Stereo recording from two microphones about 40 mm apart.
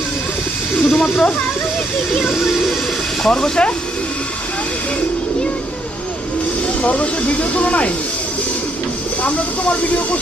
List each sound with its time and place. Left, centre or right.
0.8 s snake: centre
3.3 s speech: centre
6.8 s speech: left
9.2 s speech: left